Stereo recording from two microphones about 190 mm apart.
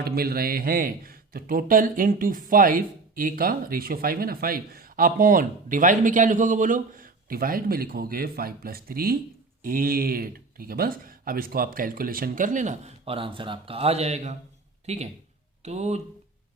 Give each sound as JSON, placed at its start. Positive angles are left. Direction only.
{"t": 0.0, "sound": "a man's voice", "side_deg": -55}